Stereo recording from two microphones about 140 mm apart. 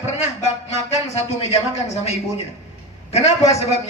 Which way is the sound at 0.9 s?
45° left (ahead or behind).